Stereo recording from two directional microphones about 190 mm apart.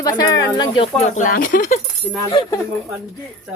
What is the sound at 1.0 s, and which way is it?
Speech, 40° left (ahead or behind).